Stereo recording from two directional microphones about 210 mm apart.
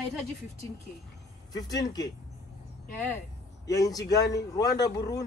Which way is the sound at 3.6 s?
15° left (ahead or behind).